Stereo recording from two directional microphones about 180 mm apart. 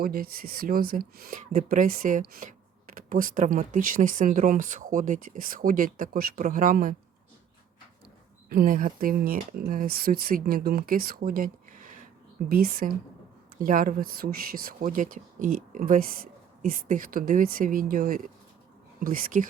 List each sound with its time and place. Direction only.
0.0 s speech: 55° right (ahead or behind)
8.4 s speech: 55° right (ahead or behind)